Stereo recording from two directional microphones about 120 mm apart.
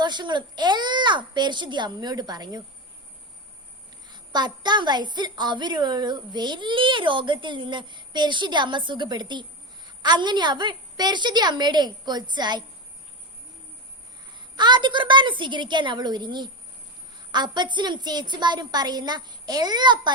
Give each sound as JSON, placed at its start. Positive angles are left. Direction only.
{"t": 0.0, "sound": "a woman's voice", "side_deg": -40}
{"t": 4.1, "sound": "a woman's voice", "side_deg": -40}
{"t": 14.3, "sound": "a woman's voice", "side_deg": -40}